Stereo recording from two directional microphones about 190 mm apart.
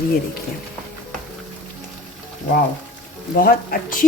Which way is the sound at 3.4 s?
50° left (ahead or behind).